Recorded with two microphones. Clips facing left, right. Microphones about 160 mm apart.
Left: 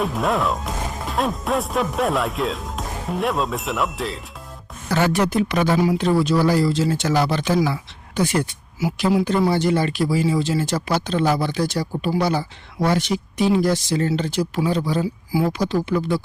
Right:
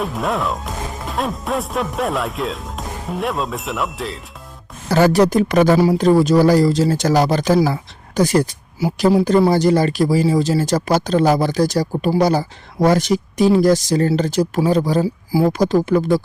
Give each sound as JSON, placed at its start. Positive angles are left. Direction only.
{"t": 0.0, "sound": "speech", "side_deg": 0}
{"t": 4.9, "sound": "speech", "side_deg": -35}